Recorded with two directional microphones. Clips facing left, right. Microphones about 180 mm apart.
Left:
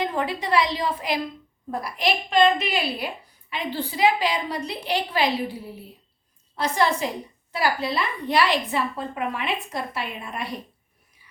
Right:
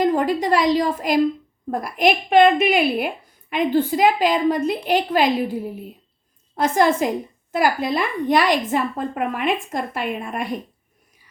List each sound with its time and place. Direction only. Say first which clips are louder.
0.0 s a woman's voice: right 8 dB; 45° right (ahead or behind)